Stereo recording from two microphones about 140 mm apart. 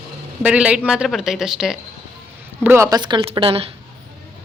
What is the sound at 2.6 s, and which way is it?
Speech, 20° right (ahead or behind).